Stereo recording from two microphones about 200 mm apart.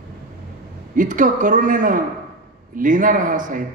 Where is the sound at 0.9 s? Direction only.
40° right (ahead or behind).